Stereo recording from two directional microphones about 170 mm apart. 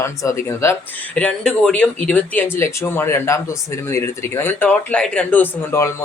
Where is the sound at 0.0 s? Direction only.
15° left (ahead or behind).